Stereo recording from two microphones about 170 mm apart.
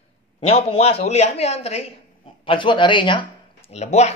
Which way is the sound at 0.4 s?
35° left (ahead or behind).